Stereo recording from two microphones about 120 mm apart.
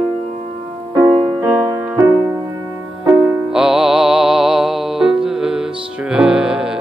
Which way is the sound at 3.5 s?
5° right (ahead or behind).